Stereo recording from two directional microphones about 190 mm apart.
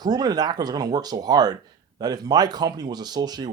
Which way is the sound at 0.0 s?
20° right (ahead or behind).